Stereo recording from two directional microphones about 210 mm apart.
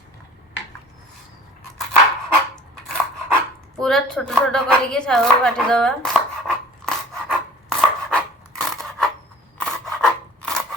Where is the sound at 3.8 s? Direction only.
5° left (ahead or behind).